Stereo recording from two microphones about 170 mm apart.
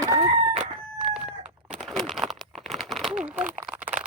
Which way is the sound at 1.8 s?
Centre (ahead or behind).